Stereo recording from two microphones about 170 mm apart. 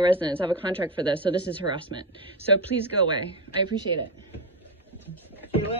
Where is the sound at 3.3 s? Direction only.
25° right (ahead or behind).